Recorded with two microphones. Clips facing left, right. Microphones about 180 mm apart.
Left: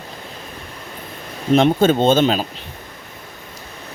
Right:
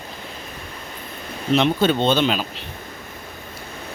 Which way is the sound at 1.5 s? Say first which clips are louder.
Left 4 dB; 45° left (ahead or behind).